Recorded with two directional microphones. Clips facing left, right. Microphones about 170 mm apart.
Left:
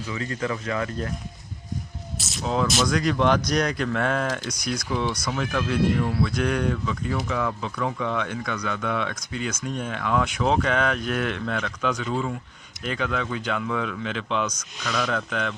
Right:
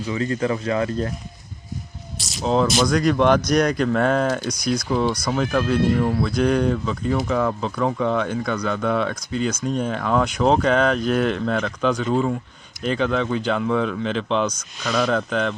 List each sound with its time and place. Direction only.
0.0 s speech: 35° right (ahead or behind)
2.1 s a sound: centre (ahead or behind)
2.4 s speech: 30° right (ahead or behind)
2.8 s speech: 45° right (ahead or behind)